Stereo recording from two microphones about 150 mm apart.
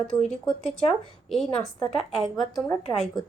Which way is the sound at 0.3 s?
Centre (ahead or behind).